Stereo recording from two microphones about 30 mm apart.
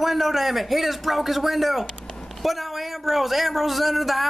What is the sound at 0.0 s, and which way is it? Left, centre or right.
Speech, centre.